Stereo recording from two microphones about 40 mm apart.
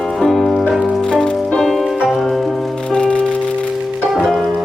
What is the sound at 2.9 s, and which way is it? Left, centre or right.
Music, left.